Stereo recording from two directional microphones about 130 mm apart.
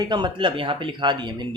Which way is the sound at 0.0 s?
35° right (ahead or behind).